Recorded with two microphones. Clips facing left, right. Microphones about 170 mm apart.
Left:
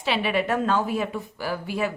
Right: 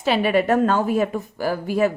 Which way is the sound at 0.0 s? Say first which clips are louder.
Right 6 dB; 45° right (ahead or behind).